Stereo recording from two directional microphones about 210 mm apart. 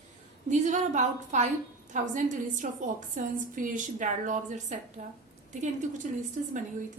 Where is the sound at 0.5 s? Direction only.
35° right (ahead or behind).